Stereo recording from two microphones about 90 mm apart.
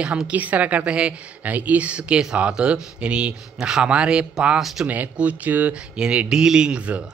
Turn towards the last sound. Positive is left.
turn(degrees=-15)  # may be behind; listen again after turning